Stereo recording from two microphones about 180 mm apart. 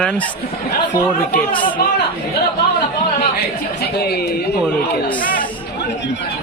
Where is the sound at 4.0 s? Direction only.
65° left (ahead or behind).